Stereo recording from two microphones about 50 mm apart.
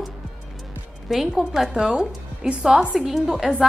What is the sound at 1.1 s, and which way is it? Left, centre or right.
A woman's voice, centre.